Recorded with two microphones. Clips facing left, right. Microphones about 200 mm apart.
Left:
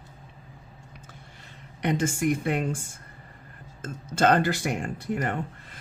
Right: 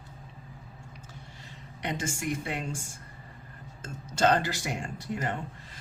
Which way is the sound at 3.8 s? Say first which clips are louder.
Left 2 dB; 55° left (ahead or behind).